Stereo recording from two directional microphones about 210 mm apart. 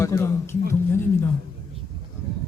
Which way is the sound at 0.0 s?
15° left (ahead or behind).